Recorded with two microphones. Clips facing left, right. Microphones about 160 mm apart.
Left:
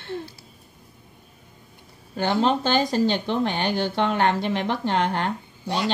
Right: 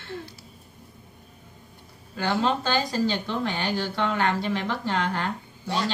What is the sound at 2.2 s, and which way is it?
Speech, 25° left (ahead or behind).